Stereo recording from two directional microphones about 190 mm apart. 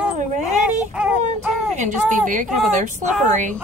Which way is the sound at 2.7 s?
40° right (ahead or behind).